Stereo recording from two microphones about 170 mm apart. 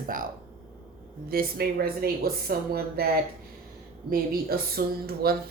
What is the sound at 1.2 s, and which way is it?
Speech, 60° right (ahead or behind).